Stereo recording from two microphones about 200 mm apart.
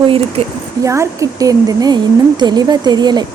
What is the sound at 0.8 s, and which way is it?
A woman's voice, 15° right (ahead or behind).